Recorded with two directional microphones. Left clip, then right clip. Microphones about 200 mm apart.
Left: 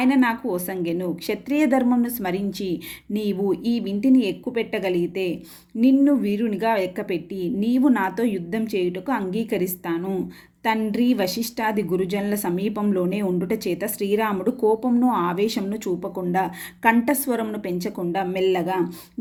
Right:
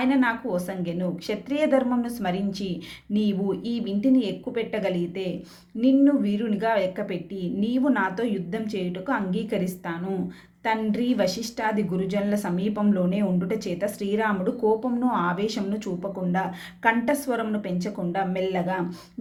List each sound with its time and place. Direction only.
0.0 s a woman's voice: 40° left (ahead or behind)